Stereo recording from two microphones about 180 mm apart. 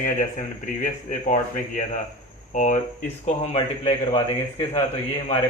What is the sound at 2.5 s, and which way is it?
Speech, 45° left (ahead or behind).